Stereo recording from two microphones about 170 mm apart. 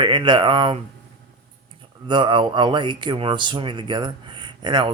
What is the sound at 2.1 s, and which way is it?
Speech, 30° right (ahead or behind).